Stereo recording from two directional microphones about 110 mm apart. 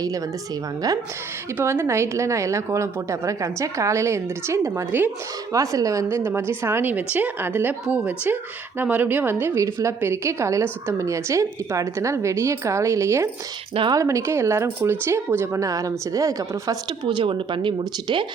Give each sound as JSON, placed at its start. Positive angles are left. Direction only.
{"t": 1.5, "sound": "a woman's voice", "side_deg": -25}
{"t": 5.5, "sound": "a woman's voice", "side_deg": -30}